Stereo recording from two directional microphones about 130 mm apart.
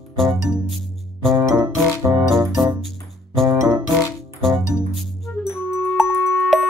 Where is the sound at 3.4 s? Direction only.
25° right (ahead or behind).